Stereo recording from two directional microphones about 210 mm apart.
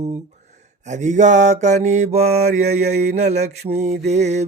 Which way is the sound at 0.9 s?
35° right (ahead or behind).